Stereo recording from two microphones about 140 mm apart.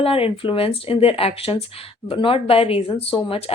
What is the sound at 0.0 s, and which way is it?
Speech, 45° left (ahead or behind).